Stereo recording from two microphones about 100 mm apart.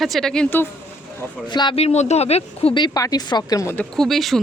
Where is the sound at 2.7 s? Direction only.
50° left (ahead or behind).